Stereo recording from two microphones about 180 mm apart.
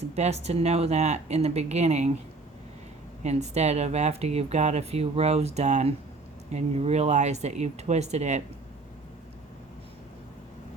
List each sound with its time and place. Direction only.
0.0 s speech: 40° right (ahead or behind)
3.2 s speech: 40° right (ahead or behind)